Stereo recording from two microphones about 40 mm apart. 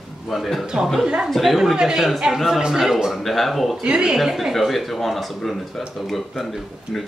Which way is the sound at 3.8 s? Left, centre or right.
Right.